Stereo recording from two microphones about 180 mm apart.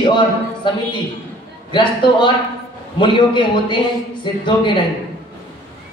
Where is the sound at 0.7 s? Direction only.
25° left (ahead or behind).